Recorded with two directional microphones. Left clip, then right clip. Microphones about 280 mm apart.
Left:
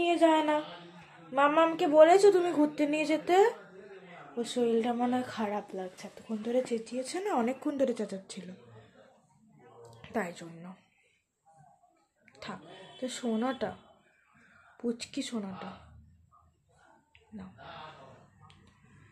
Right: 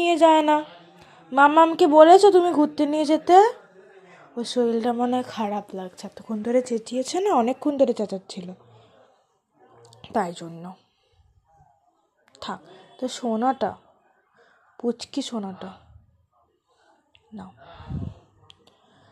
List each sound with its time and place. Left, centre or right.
0.0 s a sound: right
1.3 s speech: right
9.8 s a sound: right
12.3 s speech: right
14.8 s speech: right
18.5 s finger snapping: right